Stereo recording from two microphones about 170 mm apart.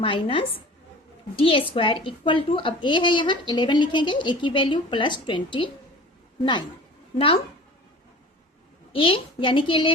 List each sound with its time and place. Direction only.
0.0 s a woman's voice: 30° left (ahead or behind)
8.9 s a woman's voice: 30° left (ahead or behind)